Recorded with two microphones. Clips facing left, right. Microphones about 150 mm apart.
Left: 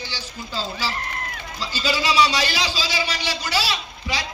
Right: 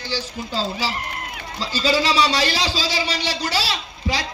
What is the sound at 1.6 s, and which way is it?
A man's voice, 30° right (ahead or behind).